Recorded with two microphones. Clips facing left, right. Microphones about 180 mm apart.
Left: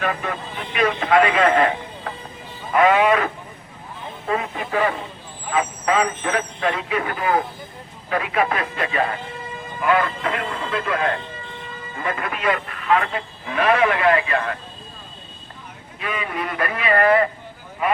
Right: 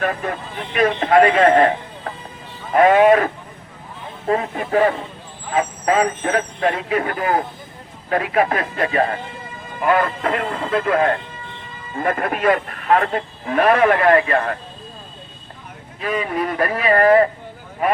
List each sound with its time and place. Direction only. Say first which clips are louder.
0.0 s speech: right 2 dB; 45° right (ahead or behind)
2.7 s speech: right 4 dB; 45° right (ahead or behind)
16.0 s speech: right 5 dB; 35° right (ahead or behind)